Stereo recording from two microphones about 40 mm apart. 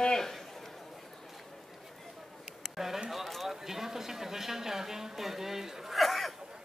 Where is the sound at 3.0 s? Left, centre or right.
Centre.